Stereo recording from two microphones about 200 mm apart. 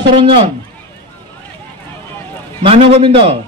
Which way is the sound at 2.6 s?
30° right (ahead or behind).